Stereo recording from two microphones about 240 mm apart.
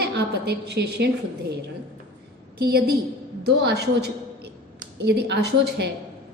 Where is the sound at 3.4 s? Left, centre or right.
Right.